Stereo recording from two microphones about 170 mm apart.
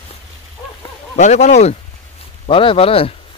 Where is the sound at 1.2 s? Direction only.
45° left (ahead or behind).